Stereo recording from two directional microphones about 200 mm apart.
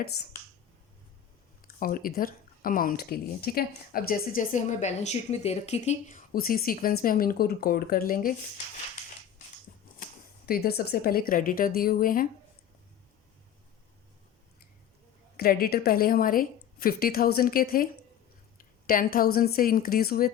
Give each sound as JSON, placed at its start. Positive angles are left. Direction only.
{"t": 1.6, "sound": "speech", "side_deg": 45}
{"t": 9.7, "sound": "a sound", "side_deg": 40}
{"t": 10.4, "sound": "speech", "side_deg": 50}
{"t": 15.4, "sound": "a woman's voice", "side_deg": 50}